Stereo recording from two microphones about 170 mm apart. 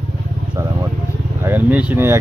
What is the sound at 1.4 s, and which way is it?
Speech, 10° right (ahead or behind).